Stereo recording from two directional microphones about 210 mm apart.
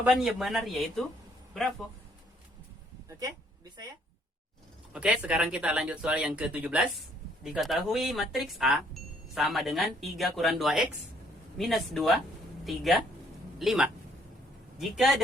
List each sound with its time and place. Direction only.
0.0 s speech: 5° right (ahead or behind)
3.1 s speech: 15° right (ahead or behind)
4.9 s speech: 5° right (ahead or behind)